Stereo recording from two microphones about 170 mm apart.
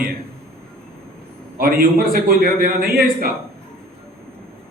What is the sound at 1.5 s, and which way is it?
A man's voice, 60° right (ahead or behind).